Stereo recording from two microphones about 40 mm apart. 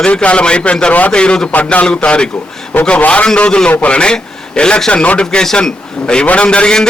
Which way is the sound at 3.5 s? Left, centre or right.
Left.